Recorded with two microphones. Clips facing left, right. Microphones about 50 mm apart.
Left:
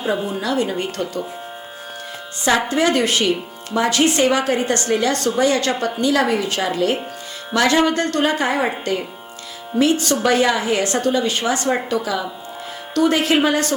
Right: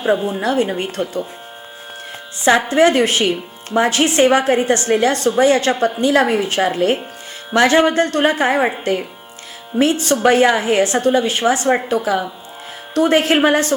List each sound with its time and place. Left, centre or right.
0.0 s a woman's voice: right
2.4 s a woman's voice: right
9.7 s a woman's voice: right